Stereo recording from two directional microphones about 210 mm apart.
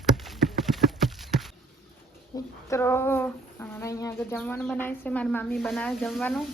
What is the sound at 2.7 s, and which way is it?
Speech, 10° left (ahead or behind).